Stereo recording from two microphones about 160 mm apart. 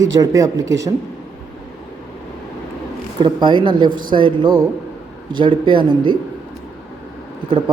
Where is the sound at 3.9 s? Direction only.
60° right (ahead or behind).